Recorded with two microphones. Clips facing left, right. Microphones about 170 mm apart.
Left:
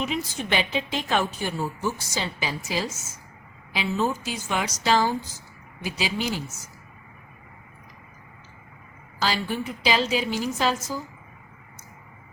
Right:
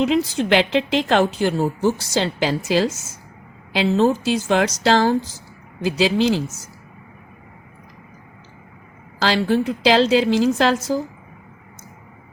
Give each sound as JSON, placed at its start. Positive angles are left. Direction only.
{"t": 0.0, "sound": "a woman's voice", "side_deg": -90}
{"t": 9.1, "sound": "a woman's voice", "side_deg": -90}